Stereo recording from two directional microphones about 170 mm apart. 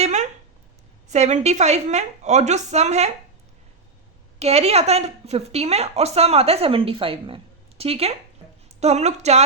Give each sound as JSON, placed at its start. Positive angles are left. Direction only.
{"t": 0.0, "sound": "a sound", "side_deg": -45}
{"t": 1.1, "sound": "speech", "side_deg": -40}
{"t": 4.4, "sound": "speech", "side_deg": -40}